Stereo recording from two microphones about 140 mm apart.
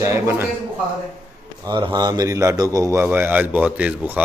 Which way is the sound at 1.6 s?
30° right (ahead or behind).